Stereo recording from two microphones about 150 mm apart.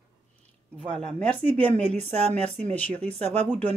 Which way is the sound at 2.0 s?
45° right (ahead or behind).